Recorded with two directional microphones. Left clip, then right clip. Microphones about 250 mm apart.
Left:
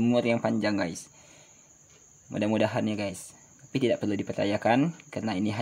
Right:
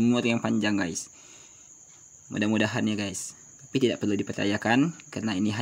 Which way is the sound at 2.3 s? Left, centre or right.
Right.